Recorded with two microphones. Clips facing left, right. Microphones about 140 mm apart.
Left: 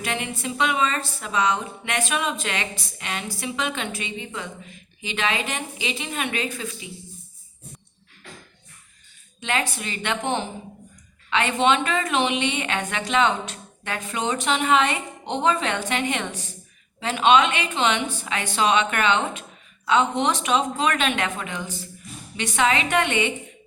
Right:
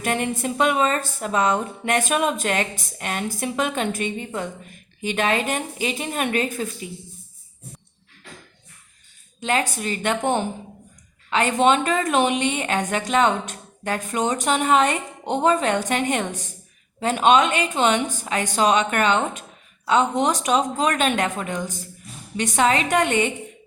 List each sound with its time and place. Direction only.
0.0 s speech: 45° right (ahead or behind)
9.4 s a woman's voice: 40° right (ahead or behind)